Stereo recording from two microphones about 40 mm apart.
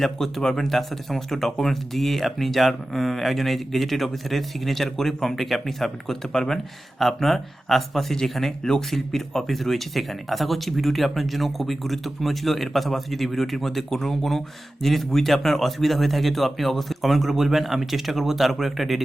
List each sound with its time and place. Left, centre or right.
0.0 s speech: centre